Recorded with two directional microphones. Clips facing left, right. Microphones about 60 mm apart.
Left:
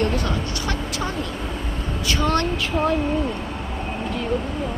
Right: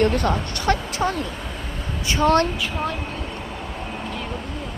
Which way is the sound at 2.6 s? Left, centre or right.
Centre.